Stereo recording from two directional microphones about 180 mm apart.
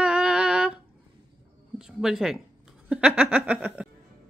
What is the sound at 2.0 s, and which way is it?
Speech, centre (ahead or behind).